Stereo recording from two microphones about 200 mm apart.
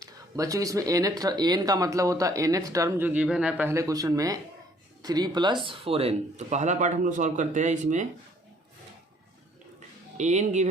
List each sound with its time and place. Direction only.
0.0 s speech: 15° right (ahead or behind); by 8.0 s 35° right (ahead or behind)
10.2 s speech: 35° right (ahead or behind)